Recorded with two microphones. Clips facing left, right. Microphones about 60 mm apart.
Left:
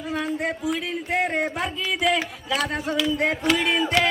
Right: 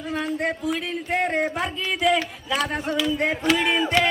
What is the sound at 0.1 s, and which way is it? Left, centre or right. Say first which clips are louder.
A man's voice: right 1 dB; centre.